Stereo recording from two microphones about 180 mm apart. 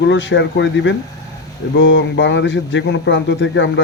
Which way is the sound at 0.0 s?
85° left.